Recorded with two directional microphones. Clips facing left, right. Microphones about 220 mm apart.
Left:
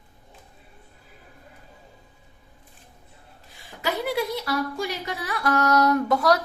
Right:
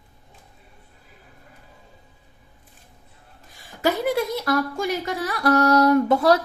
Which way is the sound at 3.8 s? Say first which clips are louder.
Right 4 dB; 45° right (ahead or behind).